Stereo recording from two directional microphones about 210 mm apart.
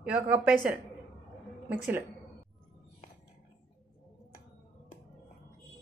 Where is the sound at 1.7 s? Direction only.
10° right (ahead or behind).